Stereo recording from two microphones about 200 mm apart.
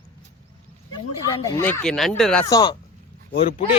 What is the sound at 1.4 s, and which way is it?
Speech, 10° left (ahead or behind).